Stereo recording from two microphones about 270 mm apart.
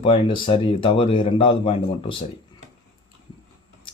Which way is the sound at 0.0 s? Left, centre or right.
Centre.